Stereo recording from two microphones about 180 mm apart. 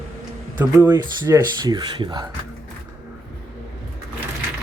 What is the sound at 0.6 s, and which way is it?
Speech, 10° right (ahead or behind).